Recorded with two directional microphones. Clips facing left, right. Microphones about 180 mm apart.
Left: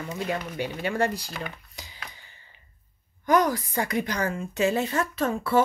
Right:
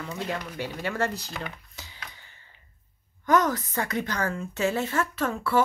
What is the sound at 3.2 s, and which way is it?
A woman's voice, 10° left (ahead or behind).